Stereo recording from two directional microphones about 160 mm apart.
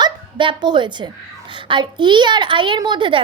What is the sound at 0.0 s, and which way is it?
A woman's voice, 30° right (ahead or behind).